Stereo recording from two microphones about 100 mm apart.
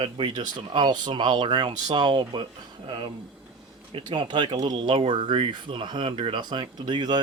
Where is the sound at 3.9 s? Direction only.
50° right (ahead or behind).